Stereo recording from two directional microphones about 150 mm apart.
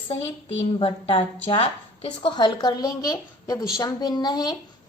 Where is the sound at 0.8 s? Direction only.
35° left (ahead or behind).